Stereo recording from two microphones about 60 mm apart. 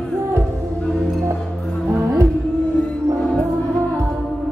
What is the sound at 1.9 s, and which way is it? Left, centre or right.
Music, right.